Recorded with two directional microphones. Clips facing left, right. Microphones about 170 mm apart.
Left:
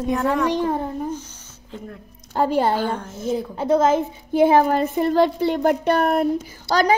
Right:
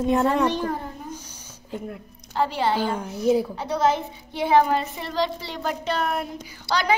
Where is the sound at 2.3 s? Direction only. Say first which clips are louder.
Left 4 dB; 45° left (ahead or behind).